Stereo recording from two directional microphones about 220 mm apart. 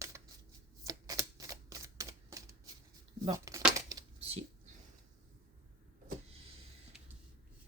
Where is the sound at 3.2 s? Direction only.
15° right (ahead or behind).